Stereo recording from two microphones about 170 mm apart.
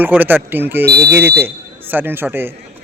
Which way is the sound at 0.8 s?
70° right (ahead or behind).